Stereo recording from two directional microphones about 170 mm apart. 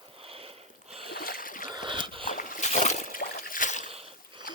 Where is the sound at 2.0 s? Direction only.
30° right (ahead or behind).